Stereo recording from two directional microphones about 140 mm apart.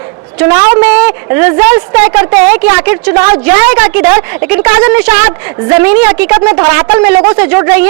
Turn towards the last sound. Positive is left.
turn(degrees=-15)  # may be behind; listen again after turning